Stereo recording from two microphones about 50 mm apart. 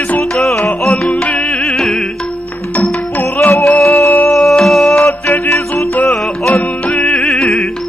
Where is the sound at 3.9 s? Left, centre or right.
Left.